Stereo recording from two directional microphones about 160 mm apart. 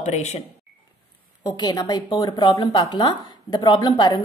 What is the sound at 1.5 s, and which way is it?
Speech, 25° left (ahead or behind).